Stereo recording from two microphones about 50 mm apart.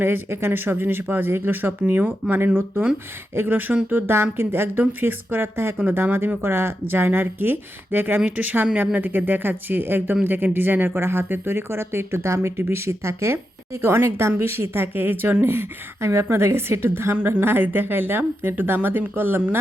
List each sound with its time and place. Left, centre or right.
0.0 s speech: right
1.9 s speech: right
3.3 s speech: right
4.8 s speech: right
12.5 s a woman's voice: right